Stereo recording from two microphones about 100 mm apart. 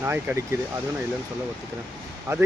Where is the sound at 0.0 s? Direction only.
25° right (ahead or behind).